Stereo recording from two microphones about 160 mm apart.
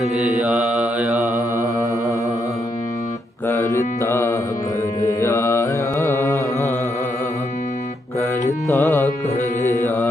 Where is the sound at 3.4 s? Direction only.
15° left (ahead or behind).